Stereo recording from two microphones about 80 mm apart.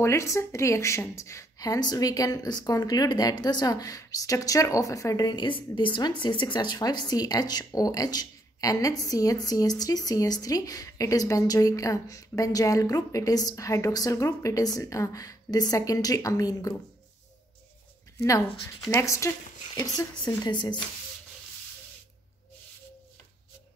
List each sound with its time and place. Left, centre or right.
0.0 s a woman's voice: left
18.9 s speech: left
20.0 s a woman's voice: left
20.5 s speech: left